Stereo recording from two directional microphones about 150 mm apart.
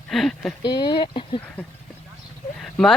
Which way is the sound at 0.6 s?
30° left (ahead or behind).